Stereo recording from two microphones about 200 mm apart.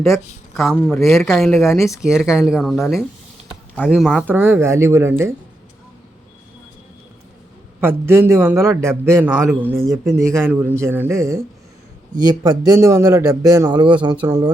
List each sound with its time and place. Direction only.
0.5 s speech: centre (ahead or behind)
1.2 s a man's voice: centre (ahead or behind)
7.8 s a man's voice: 10° right (ahead or behind)